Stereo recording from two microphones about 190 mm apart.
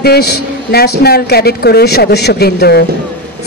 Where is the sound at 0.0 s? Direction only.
55° left (ahead or behind).